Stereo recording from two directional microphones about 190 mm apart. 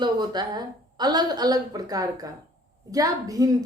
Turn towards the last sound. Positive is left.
turn(degrees=-20)  # may be behind; listen again after turning